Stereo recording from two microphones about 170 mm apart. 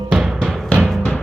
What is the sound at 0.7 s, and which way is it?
Timpani, 5° left (ahead or behind).